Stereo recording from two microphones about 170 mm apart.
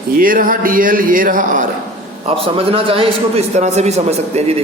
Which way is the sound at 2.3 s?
35° right (ahead or behind).